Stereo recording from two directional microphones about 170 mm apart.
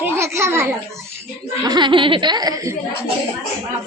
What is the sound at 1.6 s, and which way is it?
Speech, 25° right (ahead or behind).